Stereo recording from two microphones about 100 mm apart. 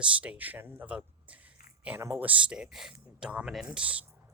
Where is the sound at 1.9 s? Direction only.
25° right (ahead or behind).